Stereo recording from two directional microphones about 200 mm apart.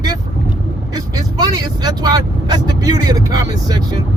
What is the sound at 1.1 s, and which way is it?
Vehicle, 20° right (ahead or behind).